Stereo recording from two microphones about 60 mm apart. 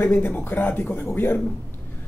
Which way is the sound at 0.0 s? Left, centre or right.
Left.